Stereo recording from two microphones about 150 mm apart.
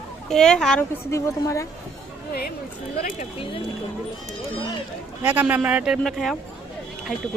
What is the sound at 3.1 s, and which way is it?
Speech, 35° left (ahead or behind).